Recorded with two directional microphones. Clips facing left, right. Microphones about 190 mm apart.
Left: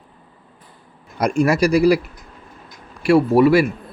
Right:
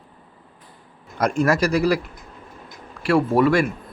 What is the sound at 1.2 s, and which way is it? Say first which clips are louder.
Speech: left 3 dB; 10° left (ahead or behind).